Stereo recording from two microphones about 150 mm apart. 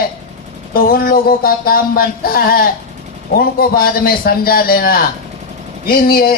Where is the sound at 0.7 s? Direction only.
75° left (ahead or behind).